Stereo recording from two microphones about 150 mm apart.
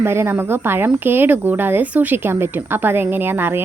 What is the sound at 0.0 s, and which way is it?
A woman's voice, 15° right (ahead or behind).